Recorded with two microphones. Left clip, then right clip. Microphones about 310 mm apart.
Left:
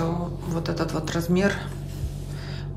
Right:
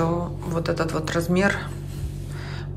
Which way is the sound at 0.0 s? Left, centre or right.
Centre.